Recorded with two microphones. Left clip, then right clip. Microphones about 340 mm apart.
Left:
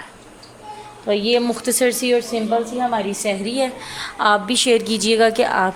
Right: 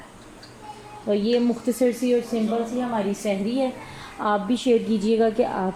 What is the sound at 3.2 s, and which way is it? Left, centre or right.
A woman's voice, left.